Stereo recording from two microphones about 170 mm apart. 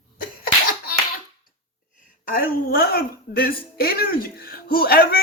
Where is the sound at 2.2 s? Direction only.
60° left (ahead or behind).